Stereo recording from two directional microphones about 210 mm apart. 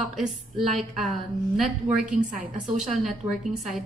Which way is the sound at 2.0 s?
40° right (ahead or behind).